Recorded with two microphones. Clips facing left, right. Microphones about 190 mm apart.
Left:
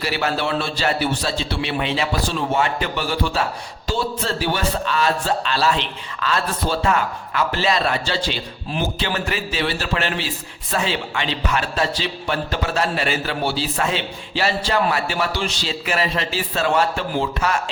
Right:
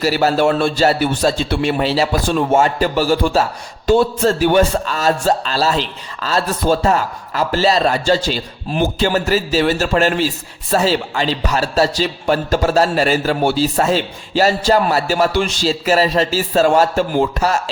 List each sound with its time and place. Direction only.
0.0 s a man's voice: 40° right (ahead or behind)
2.2 s a man's voice: 50° right (ahead or behind)